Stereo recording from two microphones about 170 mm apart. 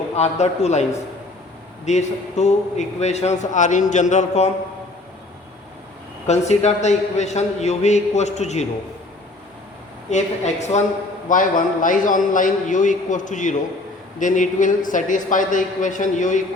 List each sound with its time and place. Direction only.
0.2 s a man's voice: 40° left (ahead or behind)
6.2 s a man's voice: 40° left (ahead or behind)
10.1 s a man's voice: 40° left (ahead or behind)